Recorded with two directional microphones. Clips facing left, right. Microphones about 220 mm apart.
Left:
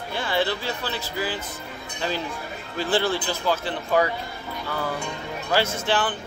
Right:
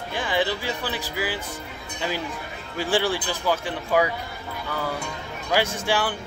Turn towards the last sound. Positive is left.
turn(degrees=-10)  # may be behind; listen again after turning